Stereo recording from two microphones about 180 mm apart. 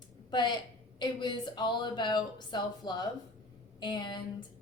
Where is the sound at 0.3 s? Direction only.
25° left (ahead or behind).